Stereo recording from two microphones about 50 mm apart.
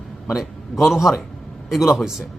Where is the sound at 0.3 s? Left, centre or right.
Centre.